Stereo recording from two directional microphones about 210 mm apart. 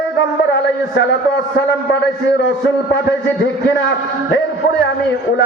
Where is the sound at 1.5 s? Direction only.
60° left (ahead or behind).